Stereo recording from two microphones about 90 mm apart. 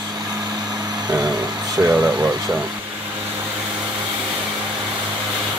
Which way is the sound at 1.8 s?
20° right (ahead or behind).